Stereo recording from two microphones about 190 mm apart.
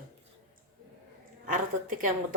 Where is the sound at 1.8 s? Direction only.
45° right (ahead or behind).